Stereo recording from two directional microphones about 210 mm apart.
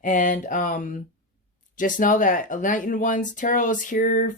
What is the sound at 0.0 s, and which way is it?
Speech, 40° left (ahead or behind).